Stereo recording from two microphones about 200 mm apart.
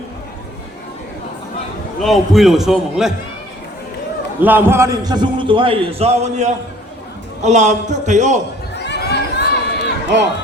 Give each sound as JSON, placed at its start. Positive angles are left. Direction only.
{"t": 2.0, "sound": "a man's voice", "side_deg": 0}
{"t": 4.4, "sound": "a man's voice", "side_deg": -10}
{"t": 8.7, "sound": "run", "side_deg": 60}